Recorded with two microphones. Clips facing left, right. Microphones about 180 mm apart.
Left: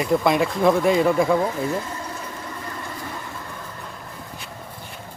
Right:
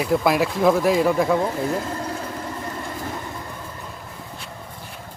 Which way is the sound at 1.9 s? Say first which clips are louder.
Right 4 dB; 50° right (ahead or behind).